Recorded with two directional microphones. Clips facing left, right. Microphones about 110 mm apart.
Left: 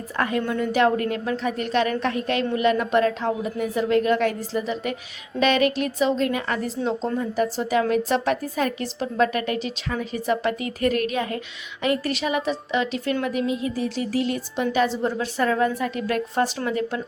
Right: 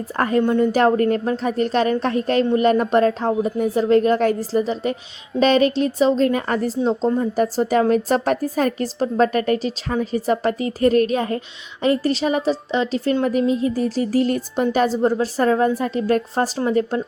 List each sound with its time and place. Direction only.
0.2 s a woman's voice: 40° right (ahead or behind)